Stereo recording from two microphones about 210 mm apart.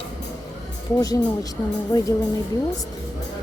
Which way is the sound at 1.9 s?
20° left (ahead or behind).